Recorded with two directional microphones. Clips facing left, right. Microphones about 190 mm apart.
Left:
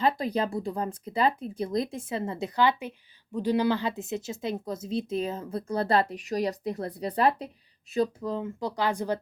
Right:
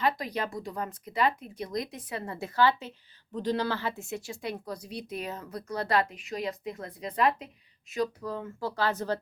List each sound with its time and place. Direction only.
0.0 s speech: 30° left (ahead or behind)
7.9 s speech: 25° left (ahead or behind)